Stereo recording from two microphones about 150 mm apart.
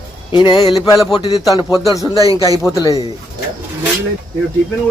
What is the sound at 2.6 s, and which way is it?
Speech, 20° left (ahead or behind).